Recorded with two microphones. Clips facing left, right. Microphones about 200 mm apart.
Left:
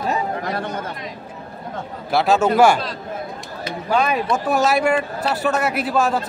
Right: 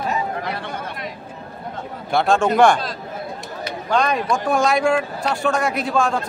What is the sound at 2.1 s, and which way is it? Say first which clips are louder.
Speech: left 1 dB; 5° left (ahead or behind).